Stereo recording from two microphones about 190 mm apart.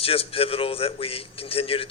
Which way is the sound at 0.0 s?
30° left (ahead or behind).